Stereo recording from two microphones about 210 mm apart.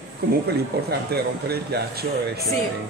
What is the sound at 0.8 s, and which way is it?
Speech, 50° right (ahead or behind).